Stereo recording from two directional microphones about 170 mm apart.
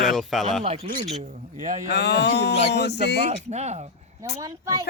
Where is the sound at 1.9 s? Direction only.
90° left.